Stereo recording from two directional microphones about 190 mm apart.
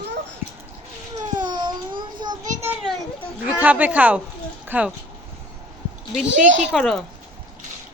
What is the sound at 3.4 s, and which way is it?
Speech, 10° right (ahead or behind).